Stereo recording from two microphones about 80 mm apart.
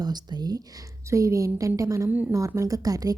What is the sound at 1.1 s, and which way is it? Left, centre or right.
A woman's voice, right.